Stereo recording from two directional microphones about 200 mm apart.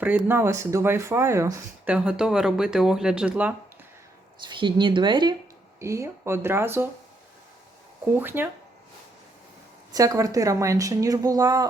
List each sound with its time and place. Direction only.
0.0 s speech: 10° right (ahead or behind)
4.4 s speech: 25° right (ahead or behind)
8.1 s speech: 10° right (ahead or behind)
9.9 s speech: 15° right (ahead or behind)